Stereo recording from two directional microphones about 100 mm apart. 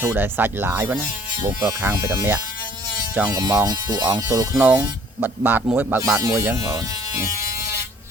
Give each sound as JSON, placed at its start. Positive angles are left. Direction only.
{"t": 0.0, "sound": "speech", "side_deg": -20}
{"t": 3.3, "sound": "speech", "side_deg": -40}
{"t": 4.5, "sound": "speech", "side_deg": -10}
{"t": 6.1, "sound": "speech", "side_deg": -35}
{"t": 6.4, "sound": "electric shaver", "side_deg": -30}